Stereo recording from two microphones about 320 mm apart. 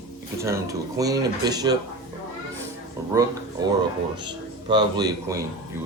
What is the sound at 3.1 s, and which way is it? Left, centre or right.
Speech, centre.